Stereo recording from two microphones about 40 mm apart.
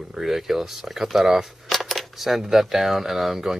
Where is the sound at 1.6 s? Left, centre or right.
Centre.